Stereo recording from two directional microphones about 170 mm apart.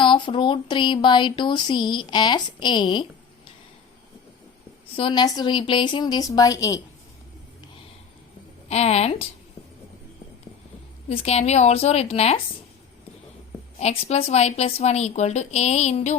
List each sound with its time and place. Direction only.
0.0 s speech: 30° left (ahead or behind)
4.9 s speech: 30° left (ahead or behind)
8.7 s a woman's voice: 40° left (ahead or behind)
11.1 s a woman's voice: 35° left (ahead or behind)
13.7 s a woman's voice: 40° left (ahead or behind)